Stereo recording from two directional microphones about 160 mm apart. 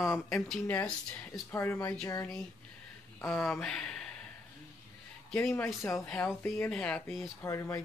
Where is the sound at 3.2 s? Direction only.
5° left (ahead or behind).